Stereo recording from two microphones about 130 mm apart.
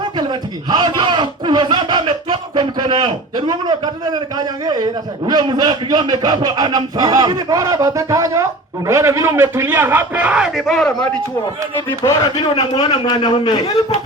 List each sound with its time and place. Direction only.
0.2 s a man's voice: 35° right (ahead or behind); by 10.9 s centre (ahead or behind)
11.9 s a man's voice: 25° left (ahead or behind)